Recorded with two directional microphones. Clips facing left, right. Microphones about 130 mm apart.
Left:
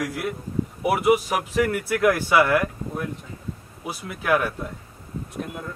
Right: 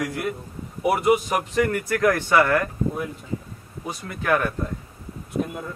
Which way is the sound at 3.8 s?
5° left (ahead or behind).